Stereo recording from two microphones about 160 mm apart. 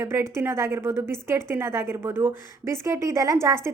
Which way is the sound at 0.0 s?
15° right (ahead or behind).